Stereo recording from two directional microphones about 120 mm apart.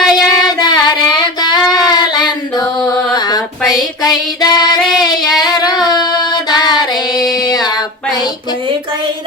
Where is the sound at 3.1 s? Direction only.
35° left (ahead or behind).